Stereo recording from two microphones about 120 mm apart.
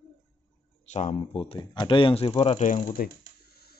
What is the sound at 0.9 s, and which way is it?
Speech, 85° left.